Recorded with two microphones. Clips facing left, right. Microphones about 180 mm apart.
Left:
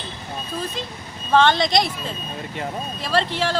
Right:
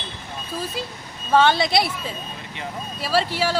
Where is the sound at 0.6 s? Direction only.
5° right (ahead or behind).